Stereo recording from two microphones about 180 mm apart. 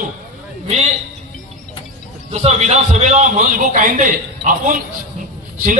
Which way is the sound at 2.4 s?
40° right (ahead or behind).